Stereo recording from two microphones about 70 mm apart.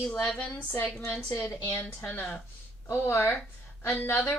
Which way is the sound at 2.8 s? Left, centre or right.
Left.